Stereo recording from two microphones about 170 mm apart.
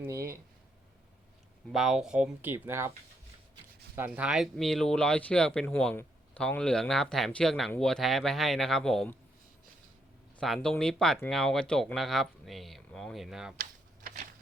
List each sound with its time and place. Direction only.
0.0 s a sound: 15° right (ahead or behind)
1.7 s speech: centre (ahead or behind)
3.9 s speech: 10° right (ahead or behind)
10.4 s speech: centre (ahead or behind)